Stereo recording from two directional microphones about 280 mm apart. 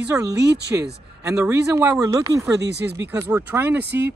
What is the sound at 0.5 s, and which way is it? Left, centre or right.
Speech, right.